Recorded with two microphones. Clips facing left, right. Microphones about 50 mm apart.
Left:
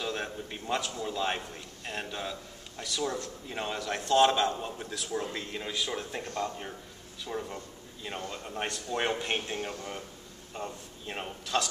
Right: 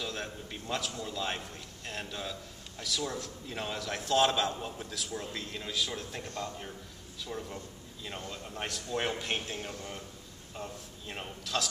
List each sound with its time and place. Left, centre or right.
0.0 s a man's voice: centre